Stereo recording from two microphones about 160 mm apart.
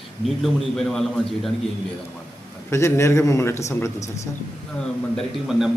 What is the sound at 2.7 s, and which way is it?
A man's voice, 15° left (ahead or behind).